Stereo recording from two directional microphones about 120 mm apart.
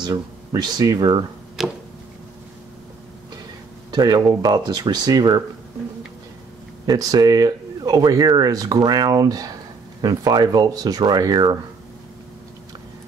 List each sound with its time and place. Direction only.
0.0 s speech: 35° right (ahead or behind)
1.6 s a sound: 5° right (ahead or behind)
3.9 s speech: 35° right (ahead or behind)
6.9 s speech: 35° right (ahead or behind)